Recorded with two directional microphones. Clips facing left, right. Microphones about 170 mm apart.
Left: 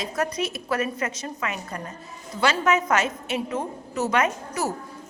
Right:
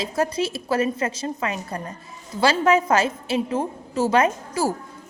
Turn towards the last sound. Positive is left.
turn(degrees=-30)  # may be behind; listen again after turning